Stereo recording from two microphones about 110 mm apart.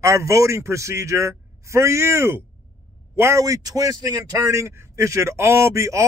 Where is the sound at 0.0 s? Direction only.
25° right (ahead or behind).